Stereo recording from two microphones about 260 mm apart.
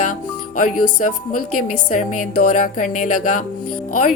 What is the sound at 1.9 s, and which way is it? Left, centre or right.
A woman's voice, left.